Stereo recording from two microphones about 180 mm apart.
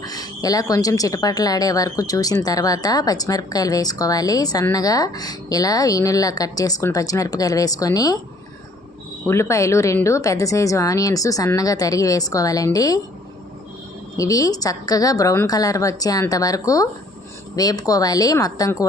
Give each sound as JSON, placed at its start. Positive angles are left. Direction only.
{"t": 0.0, "sound": "speech", "side_deg": 20}
{"t": 9.2, "sound": "a woman's voice", "side_deg": 15}
{"t": 14.2, "sound": "speech", "side_deg": 20}